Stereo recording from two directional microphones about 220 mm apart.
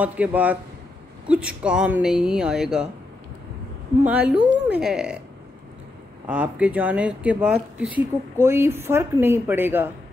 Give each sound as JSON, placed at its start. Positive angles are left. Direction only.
{"t": 0.0, "sound": "a woman's voice", "side_deg": -5}
{"t": 4.0, "sound": "a woman's voice", "side_deg": -5}
{"t": 6.2, "sound": "speech", "side_deg": -5}